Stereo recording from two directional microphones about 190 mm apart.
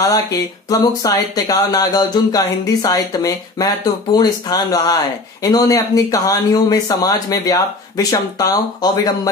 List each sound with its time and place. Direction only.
0.0 s speech: 20° left (ahead or behind)